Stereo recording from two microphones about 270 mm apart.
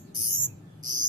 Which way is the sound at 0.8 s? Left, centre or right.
Right.